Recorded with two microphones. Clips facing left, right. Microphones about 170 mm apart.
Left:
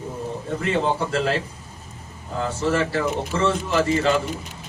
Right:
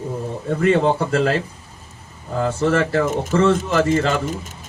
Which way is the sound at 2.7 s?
50° right (ahead or behind).